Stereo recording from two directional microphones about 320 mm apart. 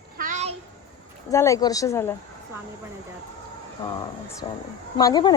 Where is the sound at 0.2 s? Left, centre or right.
Right.